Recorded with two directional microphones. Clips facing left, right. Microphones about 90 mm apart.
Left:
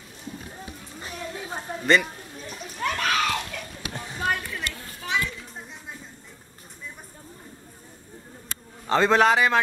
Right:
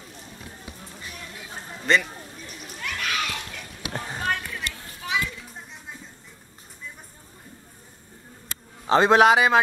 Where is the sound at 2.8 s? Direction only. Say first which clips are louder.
Left 5 dB; 40° left (ahead or behind).